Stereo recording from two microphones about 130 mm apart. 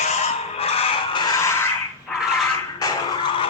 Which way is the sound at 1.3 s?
20° left (ahead or behind).